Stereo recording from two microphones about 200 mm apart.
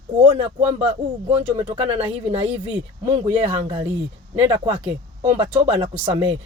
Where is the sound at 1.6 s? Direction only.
25° right (ahead or behind).